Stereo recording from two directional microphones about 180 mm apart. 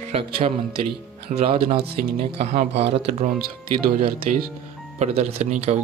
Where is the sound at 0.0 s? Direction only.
30° right (ahead or behind).